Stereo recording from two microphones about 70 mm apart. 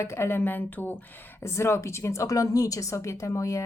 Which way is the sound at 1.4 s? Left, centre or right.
Left.